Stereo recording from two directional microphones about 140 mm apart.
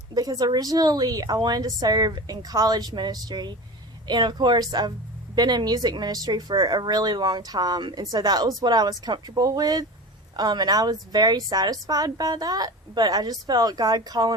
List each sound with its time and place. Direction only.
0.1 s a woman's voice: 30° right (ahead or behind)